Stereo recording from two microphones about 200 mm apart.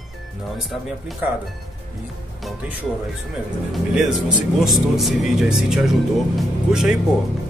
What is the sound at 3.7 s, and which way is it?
Speech, centre (ahead or behind).